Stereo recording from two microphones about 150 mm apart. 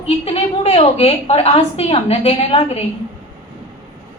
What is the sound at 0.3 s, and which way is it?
A woman's voice, 40° left (ahead or behind).